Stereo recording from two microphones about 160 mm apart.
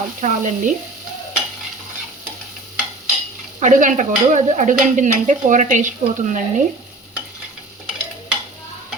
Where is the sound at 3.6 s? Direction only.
50° right (ahead or behind).